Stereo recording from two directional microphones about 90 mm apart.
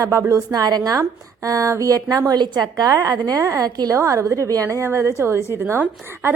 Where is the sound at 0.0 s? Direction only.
35° right (ahead or behind).